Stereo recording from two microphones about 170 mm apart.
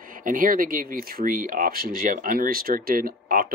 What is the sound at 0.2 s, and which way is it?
Speech, 55° right (ahead or behind).